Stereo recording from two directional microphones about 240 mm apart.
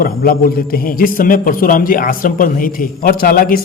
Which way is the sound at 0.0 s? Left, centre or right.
Left.